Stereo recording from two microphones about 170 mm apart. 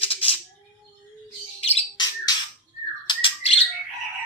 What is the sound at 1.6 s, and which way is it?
Squawk, 35° left (ahead or behind).